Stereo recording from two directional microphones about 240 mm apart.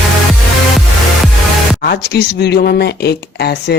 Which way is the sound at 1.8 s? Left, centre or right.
Left.